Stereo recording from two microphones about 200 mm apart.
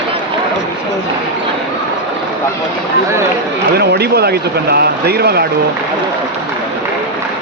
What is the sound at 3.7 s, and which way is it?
Speech, 55° right (ahead or behind).